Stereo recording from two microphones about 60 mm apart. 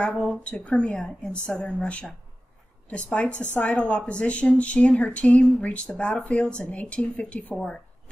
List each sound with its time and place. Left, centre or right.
0.0 s a woman's voice: centre